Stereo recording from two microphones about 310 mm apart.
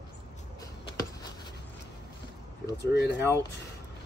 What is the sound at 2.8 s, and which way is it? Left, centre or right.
Speech, left.